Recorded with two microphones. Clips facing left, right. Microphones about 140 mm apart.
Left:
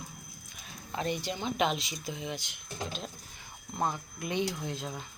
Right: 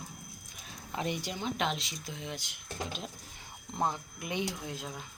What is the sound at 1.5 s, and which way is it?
Speech, 5° left (ahead or behind).